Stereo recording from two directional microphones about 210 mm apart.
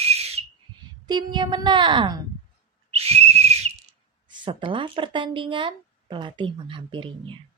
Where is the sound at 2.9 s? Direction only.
30° right (ahead or behind).